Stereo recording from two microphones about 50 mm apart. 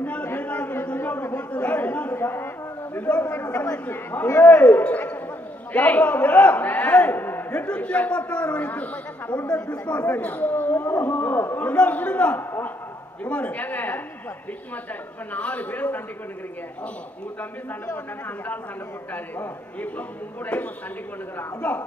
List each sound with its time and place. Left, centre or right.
0.0 s a sound: left
0.9 s a sound: left
1.5 s chatter: left
2.3 s a sound: left
3.0 s speech: left
7.2 s a sound: left
7.6 s speech: left
11.7 s speech: left
12.4 s a man's voice: left
13.2 s speech: left
15.3 s speech: left
19.1 s speech: left